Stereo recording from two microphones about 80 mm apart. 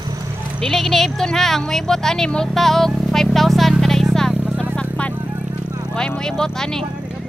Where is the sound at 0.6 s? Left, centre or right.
Centre.